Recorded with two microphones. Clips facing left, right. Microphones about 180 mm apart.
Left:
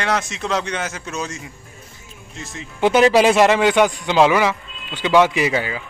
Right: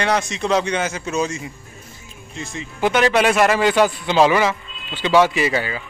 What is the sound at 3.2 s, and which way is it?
Speech, 25° left (ahead or behind).